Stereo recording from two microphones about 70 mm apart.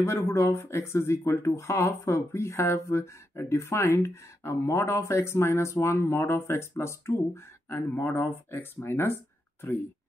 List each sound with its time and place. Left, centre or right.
0.0 s speech: left